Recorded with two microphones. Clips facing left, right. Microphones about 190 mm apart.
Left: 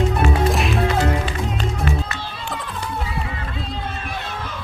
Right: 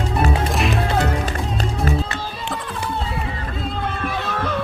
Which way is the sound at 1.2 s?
40° right (ahead or behind).